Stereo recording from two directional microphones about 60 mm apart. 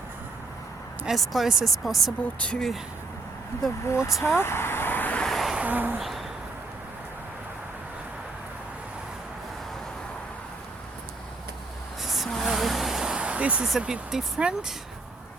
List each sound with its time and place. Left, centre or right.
1.1 s speech: centre
2.4 s speech: centre
3.8 s speech: left
4.4 s vehicle: left
5.2 s a sound: centre
5.6 s a sound: right
6.0 s a sound: centre
12.0 s vehicle: centre
13.1 s vehicle: right
13.7 s speech: centre